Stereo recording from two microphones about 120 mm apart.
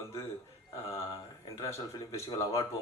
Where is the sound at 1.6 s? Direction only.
25° left (ahead or behind).